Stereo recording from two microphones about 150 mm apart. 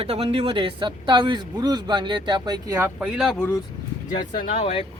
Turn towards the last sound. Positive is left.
turn(degrees=40)  # may be behind; listen again after turning